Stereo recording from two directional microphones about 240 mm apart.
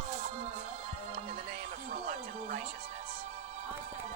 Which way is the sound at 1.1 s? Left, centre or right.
Right.